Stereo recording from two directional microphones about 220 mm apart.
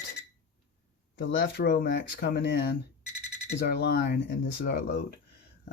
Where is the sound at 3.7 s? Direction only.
50° left (ahead or behind).